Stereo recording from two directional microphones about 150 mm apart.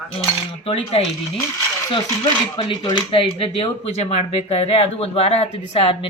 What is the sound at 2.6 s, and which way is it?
Speech, 30° left (ahead or behind).